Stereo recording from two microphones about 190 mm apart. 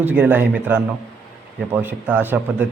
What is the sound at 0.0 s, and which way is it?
A man's voice, 10° right (ahead or behind).